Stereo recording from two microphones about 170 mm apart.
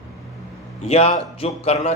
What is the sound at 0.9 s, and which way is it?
Speech, 35° left (ahead or behind).